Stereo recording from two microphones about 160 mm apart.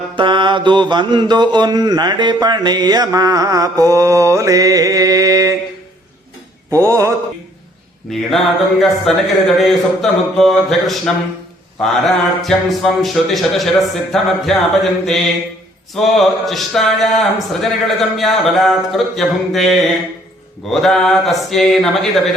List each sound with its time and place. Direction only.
0.2 s mantra: 30° right (ahead or behind)
6.7 s mantra: 20° right (ahead or behind)
8.1 s speech: centre (ahead or behind)
16.0 s speech: centre (ahead or behind)